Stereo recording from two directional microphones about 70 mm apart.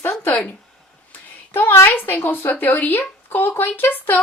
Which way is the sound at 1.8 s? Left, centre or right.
Left.